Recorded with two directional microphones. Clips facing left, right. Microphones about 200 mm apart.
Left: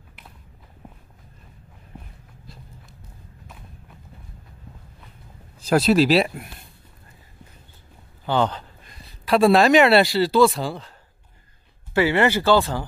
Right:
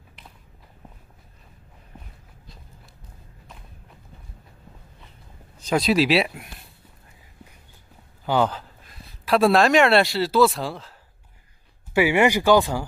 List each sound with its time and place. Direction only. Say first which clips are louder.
2.4 s walk: left 4 dB; centre (ahead or behind)
5.7 s speech: left 3 dB; centre (ahead or behind)
8.3 s speech: even; 5° right (ahead or behind)
11.9 s speech: even; 15° right (ahead or behind)